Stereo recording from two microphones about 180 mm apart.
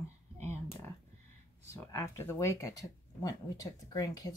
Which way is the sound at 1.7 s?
15° left (ahead or behind).